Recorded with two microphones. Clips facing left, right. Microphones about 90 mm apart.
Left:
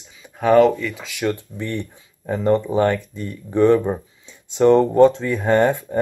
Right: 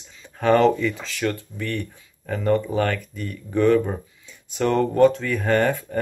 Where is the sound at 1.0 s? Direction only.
15° left (ahead or behind).